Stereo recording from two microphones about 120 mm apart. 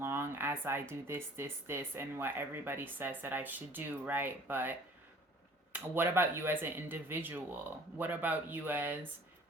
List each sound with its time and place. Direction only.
0.0 s speech: 20° right (ahead or behind)